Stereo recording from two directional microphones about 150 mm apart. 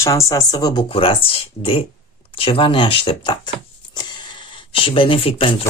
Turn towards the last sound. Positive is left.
turn(degrees=40)  # may be behind; listen again after turning